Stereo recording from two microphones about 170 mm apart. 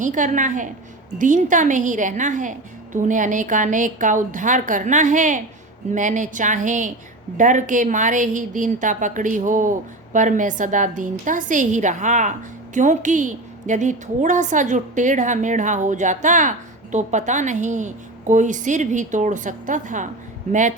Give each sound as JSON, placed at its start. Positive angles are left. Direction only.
{"t": 0.0, "sound": "a woman's voice", "side_deg": -50}